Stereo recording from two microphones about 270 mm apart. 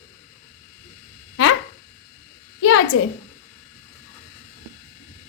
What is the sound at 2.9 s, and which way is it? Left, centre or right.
Speech, left.